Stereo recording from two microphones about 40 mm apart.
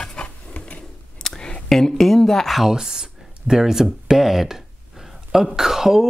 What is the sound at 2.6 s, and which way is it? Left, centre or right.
Speech, centre.